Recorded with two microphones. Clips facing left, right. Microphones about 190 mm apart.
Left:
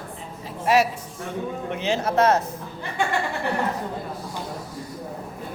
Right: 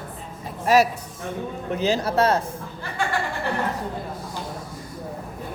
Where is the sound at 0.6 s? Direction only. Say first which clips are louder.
Right 2 dB; 40° right (ahead or behind).